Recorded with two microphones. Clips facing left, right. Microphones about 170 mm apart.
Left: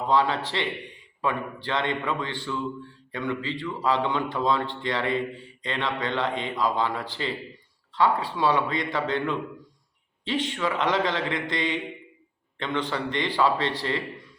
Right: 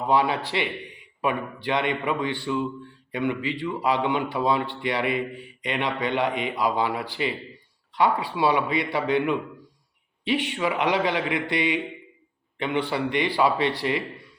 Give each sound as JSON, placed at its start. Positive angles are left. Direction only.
{"t": 0.1, "sound": "a man's voice", "side_deg": -15}